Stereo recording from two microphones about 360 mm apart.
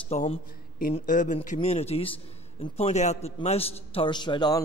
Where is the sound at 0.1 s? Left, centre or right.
Centre.